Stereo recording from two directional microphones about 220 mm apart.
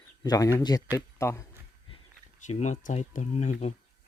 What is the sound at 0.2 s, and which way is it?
Speech, 15° left (ahead or behind).